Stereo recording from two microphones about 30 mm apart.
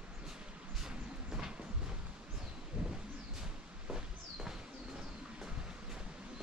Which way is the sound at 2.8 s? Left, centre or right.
Right.